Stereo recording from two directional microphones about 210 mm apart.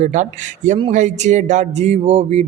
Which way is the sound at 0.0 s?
35° right (ahead or behind).